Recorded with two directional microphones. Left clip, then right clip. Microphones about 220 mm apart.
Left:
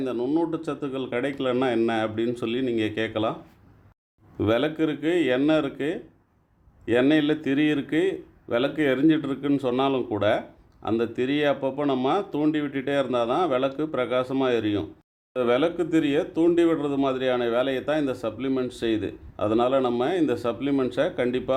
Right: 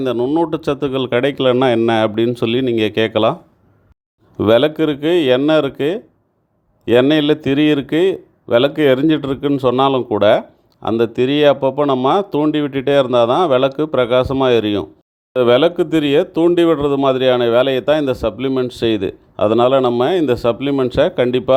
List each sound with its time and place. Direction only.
0.0 s speech: 35° right (ahead or behind)
4.4 s speech: 30° right (ahead or behind)